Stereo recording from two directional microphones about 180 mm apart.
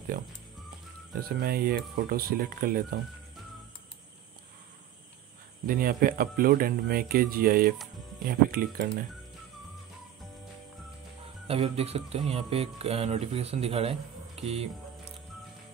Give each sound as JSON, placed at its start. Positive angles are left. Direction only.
{"t": 1.4, "sound": "speech", "side_deg": -55}
{"t": 5.7, "sound": "speech", "side_deg": -55}
{"t": 11.4, "sound": "speech", "side_deg": -35}